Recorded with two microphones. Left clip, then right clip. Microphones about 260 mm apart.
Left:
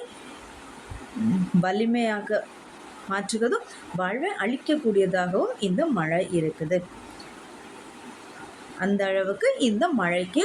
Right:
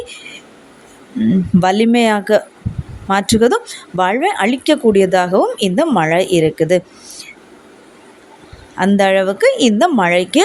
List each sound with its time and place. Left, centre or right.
1.6 s speech: right
8.8 s speech: right